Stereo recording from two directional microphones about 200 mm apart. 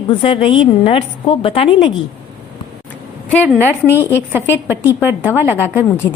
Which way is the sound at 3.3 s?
5° left (ahead or behind).